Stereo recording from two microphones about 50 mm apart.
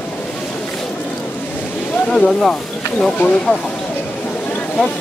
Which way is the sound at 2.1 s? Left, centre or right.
Centre.